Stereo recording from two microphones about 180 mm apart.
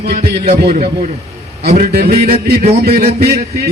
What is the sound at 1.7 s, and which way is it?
A man's voice, 60° right (ahead or behind).